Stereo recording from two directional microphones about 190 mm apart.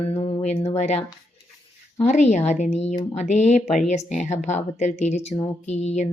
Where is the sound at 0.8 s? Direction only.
35° left (ahead or behind).